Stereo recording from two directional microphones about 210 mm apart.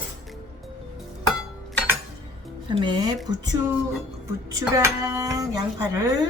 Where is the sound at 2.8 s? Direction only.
20° right (ahead or behind).